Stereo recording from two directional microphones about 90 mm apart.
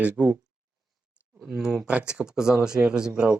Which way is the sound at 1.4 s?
Centre (ahead or behind).